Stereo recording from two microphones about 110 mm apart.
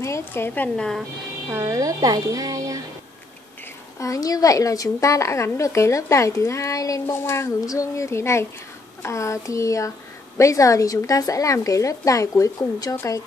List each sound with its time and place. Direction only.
0.0 s a woman's voice: 20° left (ahead or behind)
0.7 s speech: 5° left (ahead or behind)
1.6 s speech: 30° right (ahead or behind)
4.0 s a woman's voice: 30° left (ahead or behind)